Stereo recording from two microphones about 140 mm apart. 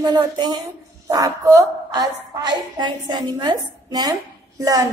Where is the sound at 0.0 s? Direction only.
30° right (ahead or behind).